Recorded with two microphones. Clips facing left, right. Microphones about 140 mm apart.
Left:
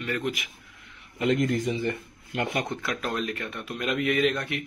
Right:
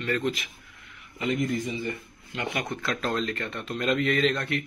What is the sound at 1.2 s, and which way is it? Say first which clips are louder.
Speech: left 3 dB; 75° left (ahead or behind).